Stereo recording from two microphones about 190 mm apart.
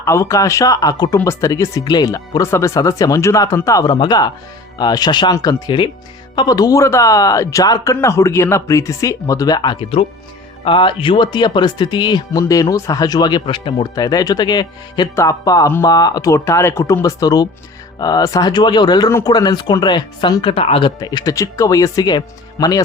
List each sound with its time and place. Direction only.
0.0 s speech: 15° left (ahead or behind)